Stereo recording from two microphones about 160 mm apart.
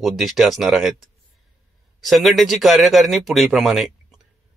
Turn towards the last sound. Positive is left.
turn(degrees=0)  # may be behind; listen again after turning